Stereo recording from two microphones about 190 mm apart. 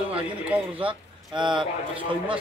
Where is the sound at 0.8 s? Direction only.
25° right (ahead or behind).